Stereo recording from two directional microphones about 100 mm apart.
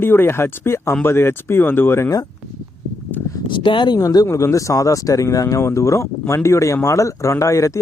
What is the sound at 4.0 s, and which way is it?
Speech, 35° left (ahead or behind).